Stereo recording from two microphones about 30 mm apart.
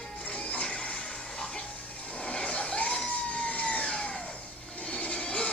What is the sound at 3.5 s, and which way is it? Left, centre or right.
Vehicle, left.